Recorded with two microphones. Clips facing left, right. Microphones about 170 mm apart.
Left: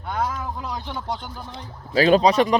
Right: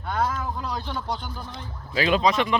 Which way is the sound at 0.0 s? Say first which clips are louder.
Even; 10° left (ahead or behind).